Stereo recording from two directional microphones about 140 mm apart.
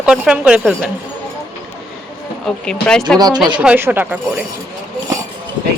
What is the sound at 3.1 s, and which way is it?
Speech, 5° left (ahead or behind).